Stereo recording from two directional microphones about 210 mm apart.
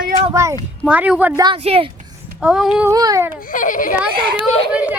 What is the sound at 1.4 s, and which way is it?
Speech, 25° right (ahead or behind).